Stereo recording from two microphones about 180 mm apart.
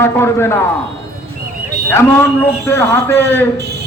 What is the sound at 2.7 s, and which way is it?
Speech, 15° left (ahead or behind).